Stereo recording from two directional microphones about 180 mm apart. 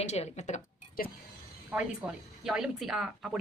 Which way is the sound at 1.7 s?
10° right (ahead or behind).